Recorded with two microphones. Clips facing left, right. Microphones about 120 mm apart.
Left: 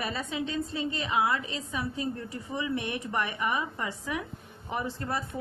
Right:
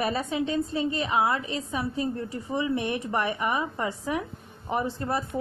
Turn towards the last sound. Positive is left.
turn(degrees=-30)  # may be behind; listen again after turning